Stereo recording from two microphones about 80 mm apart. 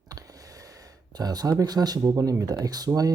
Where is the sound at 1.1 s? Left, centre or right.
Right.